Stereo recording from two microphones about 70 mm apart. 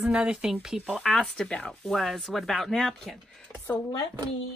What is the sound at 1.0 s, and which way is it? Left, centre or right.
Speech, centre.